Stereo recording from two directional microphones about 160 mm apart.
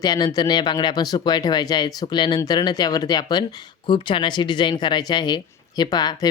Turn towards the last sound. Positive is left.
turn(degrees=25)  # may be behind; listen again after turning